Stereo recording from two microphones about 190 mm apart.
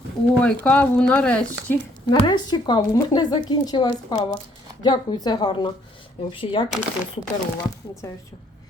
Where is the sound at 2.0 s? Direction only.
20° left (ahead or behind).